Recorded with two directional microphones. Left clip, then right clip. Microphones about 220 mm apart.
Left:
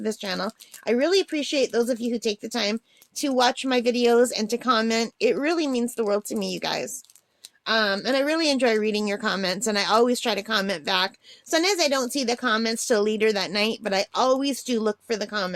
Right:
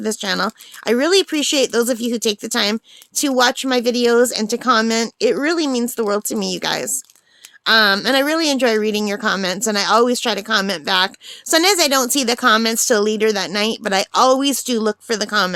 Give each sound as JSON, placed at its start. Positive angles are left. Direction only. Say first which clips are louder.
{"t": 0.0, "sound": "speech", "louder": "right 8 dB", "side_deg": -25}